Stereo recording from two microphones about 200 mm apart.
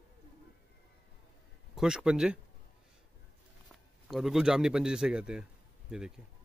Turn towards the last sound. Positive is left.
turn(degrees=-5)  # may be behind; listen again after turning